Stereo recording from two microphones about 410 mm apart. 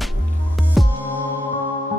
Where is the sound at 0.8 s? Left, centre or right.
Centre.